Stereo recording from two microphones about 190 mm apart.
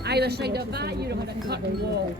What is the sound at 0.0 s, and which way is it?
Speech, 60° right (ahead or behind).